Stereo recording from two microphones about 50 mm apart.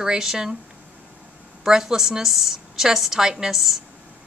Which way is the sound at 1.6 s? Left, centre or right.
Centre.